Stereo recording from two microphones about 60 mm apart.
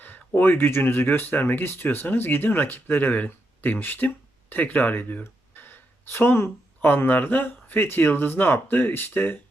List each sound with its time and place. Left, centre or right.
0.3 s speech: left